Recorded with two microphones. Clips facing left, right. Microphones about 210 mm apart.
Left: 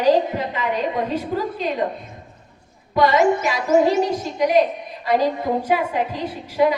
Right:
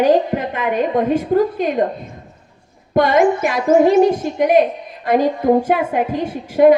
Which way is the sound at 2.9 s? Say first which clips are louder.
Right 3 dB; 50° right (ahead or behind).